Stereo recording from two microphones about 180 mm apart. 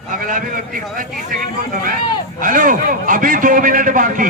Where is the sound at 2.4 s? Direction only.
45° right (ahead or behind).